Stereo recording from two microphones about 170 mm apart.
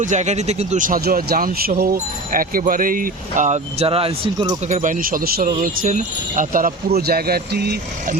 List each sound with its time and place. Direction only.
0.0 s speech: 45° right (ahead or behind); by 4.5 s 30° right (ahead or behind)
4.7 s speech: 50° right (ahead or behind); by 7.8 s 70° right (ahead or behind)